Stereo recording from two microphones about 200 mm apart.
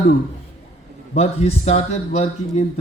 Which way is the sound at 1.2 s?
30° left (ahead or behind).